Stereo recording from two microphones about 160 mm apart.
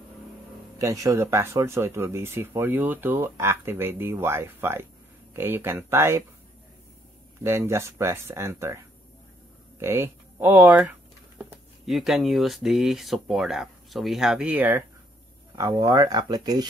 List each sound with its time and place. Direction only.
0.7 s speech: 20° right (ahead or behind)
7.4 s speech: 15° right (ahead or behind)